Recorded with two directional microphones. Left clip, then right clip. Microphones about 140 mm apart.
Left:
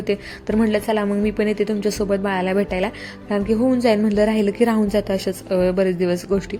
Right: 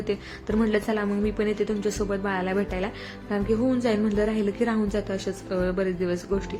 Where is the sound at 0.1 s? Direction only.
40° left (ahead or behind).